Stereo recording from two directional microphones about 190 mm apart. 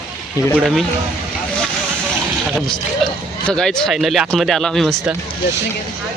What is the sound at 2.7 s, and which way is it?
Speech, 5° left (ahead or behind).